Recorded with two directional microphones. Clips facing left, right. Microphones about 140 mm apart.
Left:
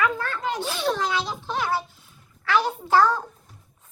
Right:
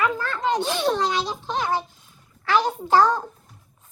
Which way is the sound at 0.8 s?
35° right (ahead or behind).